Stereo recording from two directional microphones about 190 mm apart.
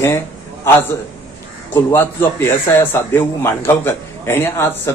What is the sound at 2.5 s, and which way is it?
A man's voice, 10° left (ahead or behind).